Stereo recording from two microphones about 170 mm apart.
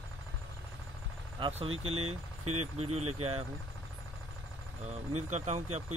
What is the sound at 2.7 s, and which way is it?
Speech, 35° right (ahead or behind).